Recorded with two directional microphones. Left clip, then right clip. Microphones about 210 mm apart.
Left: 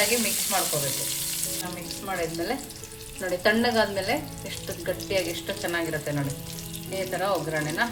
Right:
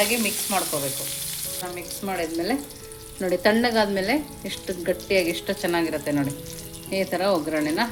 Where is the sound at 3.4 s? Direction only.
35° right (ahead or behind).